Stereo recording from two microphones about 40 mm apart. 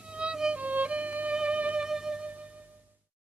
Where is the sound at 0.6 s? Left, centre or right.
Right.